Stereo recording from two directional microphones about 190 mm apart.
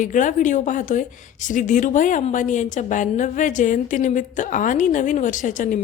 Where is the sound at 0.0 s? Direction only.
40° left (ahead or behind).